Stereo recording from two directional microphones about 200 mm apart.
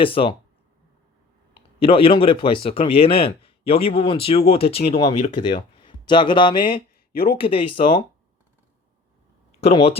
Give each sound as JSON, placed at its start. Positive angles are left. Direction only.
{"t": 0.0, "sound": "speech", "side_deg": 25}
{"t": 1.5, "sound": "speech", "side_deg": 30}
{"t": 7.1, "sound": "speech", "side_deg": 50}
{"t": 7.3, "sound": "speech", "side_deg": 25}
{"t": 9.6, "sound": "speech", "side_deg": 30}